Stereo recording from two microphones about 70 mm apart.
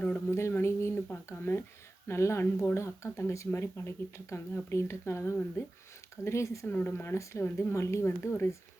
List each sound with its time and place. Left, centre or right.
0.3 s speech: left
0.6 s a sound: left
2.0 s speech: left
6.7 s speech: left